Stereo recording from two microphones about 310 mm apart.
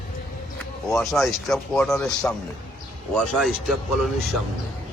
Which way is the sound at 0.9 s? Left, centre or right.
Centre.